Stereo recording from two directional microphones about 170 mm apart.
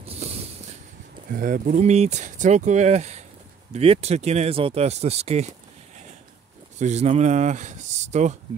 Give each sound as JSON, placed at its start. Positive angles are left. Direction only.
{"t": 0.0, "sound": "a sound", "side_deg": -35}
{"t": 1.3, "sound": "speech", "side_deg": -50}
{"t": 6.8, "sound": "speech", "side_deg": -40}